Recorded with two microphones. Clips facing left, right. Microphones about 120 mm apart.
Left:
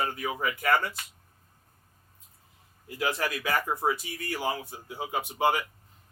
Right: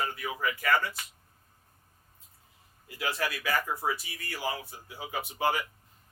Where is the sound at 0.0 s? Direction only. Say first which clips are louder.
Left 2 dB; 35° left (ahead or behind).